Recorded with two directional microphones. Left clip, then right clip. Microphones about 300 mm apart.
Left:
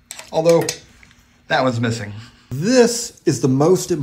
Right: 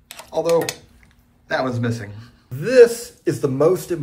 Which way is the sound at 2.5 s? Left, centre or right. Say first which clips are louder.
Right 3 dB; left.